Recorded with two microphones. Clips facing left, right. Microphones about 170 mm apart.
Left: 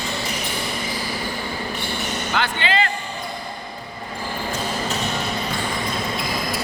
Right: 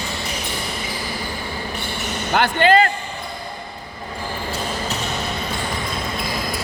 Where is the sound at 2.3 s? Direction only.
45° right (ahead or behind).